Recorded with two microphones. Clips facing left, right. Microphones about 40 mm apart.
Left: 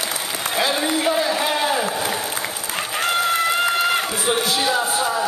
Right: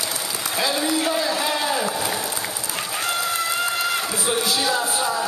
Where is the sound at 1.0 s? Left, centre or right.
Left.